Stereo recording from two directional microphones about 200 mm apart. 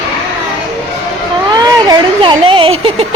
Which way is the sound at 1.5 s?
20° right (ahead or behind).